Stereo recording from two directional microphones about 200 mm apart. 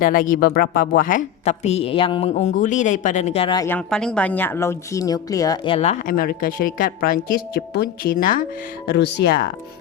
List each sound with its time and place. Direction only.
0.0 s a woman's voice: 45° left (ahead or behind); by 3.8 s 20° left (ahead or behind)
3.8 s speech: 5° left (ahead or behind); by 6.1 s 35° left (ahead or behind)
6.1 s speech: 45° left (ahead or behind)
9.0 s speech: 55° left (ahead or behind)